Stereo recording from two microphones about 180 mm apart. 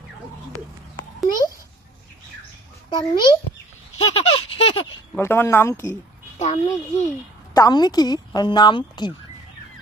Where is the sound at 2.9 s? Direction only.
25° left (ahead or behind).